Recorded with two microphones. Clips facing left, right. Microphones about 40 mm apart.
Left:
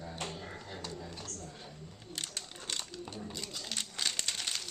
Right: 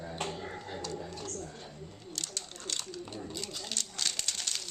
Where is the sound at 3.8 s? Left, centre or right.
Centre.